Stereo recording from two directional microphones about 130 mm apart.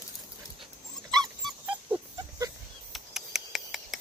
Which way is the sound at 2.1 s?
25° right (ahead or behind).